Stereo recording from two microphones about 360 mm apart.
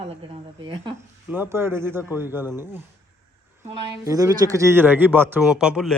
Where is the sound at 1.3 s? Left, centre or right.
Centre.